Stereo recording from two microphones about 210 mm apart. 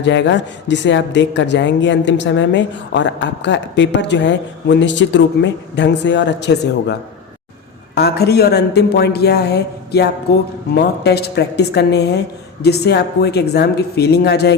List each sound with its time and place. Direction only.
0.0 s speech: 60° left (ahead or behind)
7.9 s a woman's voice: 50° left (ahead or behind)